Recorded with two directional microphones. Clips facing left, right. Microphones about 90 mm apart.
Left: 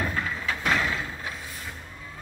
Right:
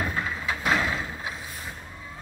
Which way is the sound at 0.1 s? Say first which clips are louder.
Even; 15° right (ahead or behind).